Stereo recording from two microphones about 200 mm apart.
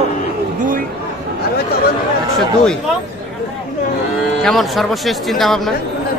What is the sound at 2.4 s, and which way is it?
Speech, 5° left (ahead or behind).